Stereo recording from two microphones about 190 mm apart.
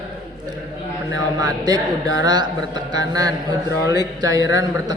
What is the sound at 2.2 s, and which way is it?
A man's voice, 20° right (ahead or behind).